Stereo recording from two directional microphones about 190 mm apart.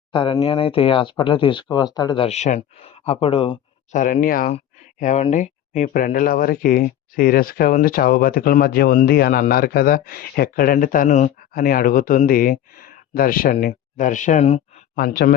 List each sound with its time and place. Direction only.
0.1 s speech: 25° left (ahead or behind)
3.9 s speech: 45° left (ahead or behind)
14.9 s speech: 50° left (ahead or behind)